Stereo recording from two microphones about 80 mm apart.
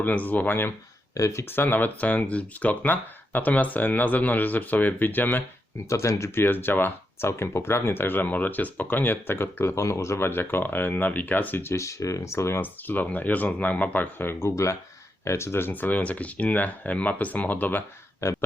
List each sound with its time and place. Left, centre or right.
0.0 s speech: left
1.1 s speech: left
5.9 s speech: left
18.2 s speech: left